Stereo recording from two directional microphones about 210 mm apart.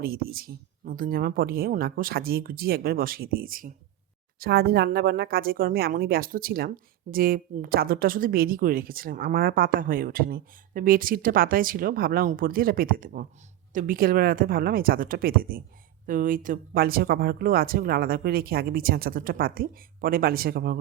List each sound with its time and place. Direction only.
0.0 s speech: 45° right (ahead or behind)